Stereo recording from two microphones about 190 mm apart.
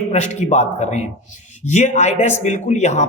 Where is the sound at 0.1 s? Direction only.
35° left (ahead or behind).